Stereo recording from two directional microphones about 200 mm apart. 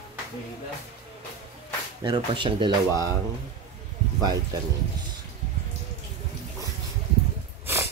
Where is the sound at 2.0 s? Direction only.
25° right (ahead or behind).